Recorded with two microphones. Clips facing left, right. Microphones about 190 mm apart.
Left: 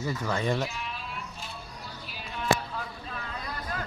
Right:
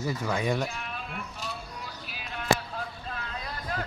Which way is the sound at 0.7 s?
50° right (ahead or behind).